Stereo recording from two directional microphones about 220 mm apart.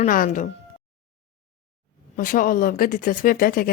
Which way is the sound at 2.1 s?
40° left (ahead or behind).